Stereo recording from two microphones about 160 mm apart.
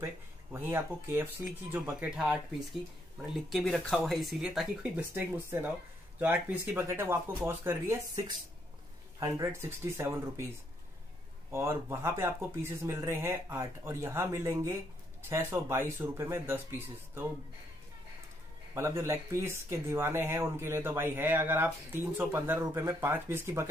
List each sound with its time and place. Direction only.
0.0 s speech: 15° right (ahead or behind)
11.5 s speech: 15° right (ahead or behind)
18.8 s speech: 15° right (ahead or behind)